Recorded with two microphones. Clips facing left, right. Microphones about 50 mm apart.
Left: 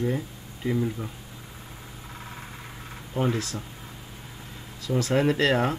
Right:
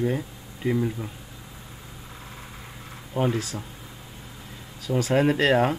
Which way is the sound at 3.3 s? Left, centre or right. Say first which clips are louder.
Right 1 dB; left.